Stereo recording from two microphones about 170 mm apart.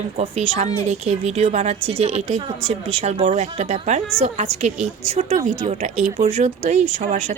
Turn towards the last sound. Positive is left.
turn(degrees=-45)  # may be behind; listen again after turning